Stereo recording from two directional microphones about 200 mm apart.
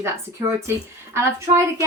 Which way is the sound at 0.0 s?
15° right (ahead or behind).